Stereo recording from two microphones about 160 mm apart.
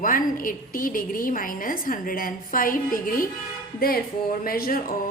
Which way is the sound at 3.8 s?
65° left (ahead or behind).